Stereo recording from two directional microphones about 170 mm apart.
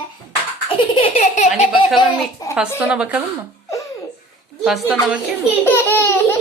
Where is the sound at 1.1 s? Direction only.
45° left (ahead or behind).